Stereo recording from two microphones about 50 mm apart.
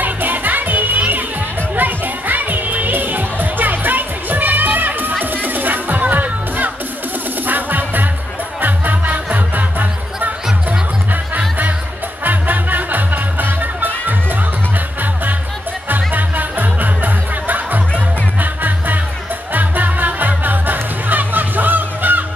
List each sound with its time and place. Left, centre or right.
0.0 s music: right
11.3 s music: right
15.9 s music: right